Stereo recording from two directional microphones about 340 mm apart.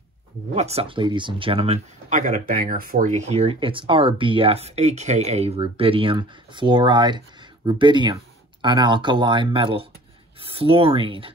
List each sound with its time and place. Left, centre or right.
0.6 s speech: centre